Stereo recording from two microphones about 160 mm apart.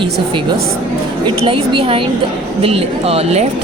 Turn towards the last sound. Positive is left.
turn(degrees=-40)  # may be behind; listen again after turning